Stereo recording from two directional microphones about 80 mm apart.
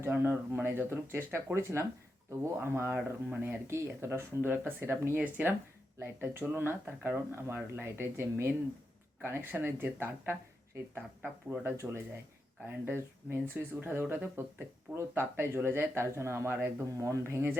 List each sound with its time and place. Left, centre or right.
0.0 s speech: right